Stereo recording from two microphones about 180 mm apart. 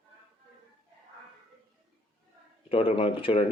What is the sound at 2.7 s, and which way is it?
Speech, 30° left (ahead or behind).